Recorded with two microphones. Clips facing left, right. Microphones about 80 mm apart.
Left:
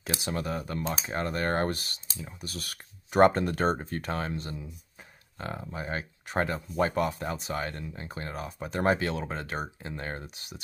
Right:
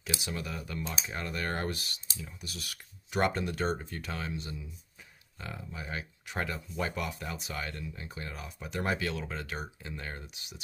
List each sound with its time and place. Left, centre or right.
0.0 s speech: left